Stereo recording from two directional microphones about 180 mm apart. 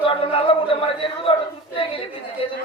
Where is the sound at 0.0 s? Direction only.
30° left (ahead or behind).